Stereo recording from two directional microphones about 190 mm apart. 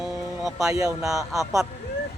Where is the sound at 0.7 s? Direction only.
15° right (ahead or behind).